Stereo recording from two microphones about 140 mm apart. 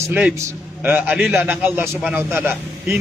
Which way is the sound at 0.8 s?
10° right (ahead or behind).